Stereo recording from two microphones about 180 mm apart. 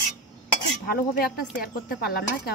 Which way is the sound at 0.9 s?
55° left (ahead or behind).